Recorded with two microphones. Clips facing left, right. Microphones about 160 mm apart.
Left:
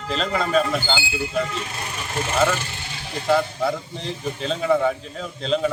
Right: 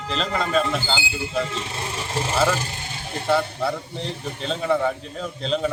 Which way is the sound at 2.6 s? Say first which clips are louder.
Right 1 dB; 40° right (ahead or behind).